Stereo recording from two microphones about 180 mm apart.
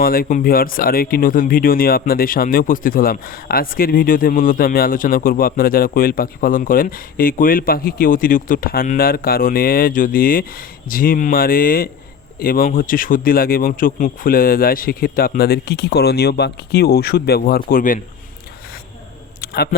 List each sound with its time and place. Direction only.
0.0 s speech: 55° left (ahead or behind)